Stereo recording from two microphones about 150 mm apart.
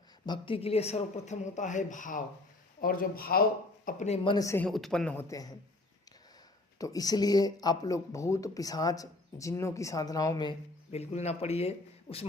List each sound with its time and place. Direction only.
0.3 s a man's voice: 35° left (ahead or behind); by 2.2 s 60° left (ahead or behind)
2.8 s speech: 70° left (ahead or behind)
3.8 s a man's voice: 50° left (ahead or behind)
4.2 s speech: 35° left (ahead or behind)
4.4 s speech: 15° left (ahead or behind)
4.7 s speech: 5° left (ahead or behind)
5.3 s speech: 25° left (ahead or behind)
6.7 s speech: 25° left (ahead or behind)
10.9 s a man's voice: 45° left (ahead or behind)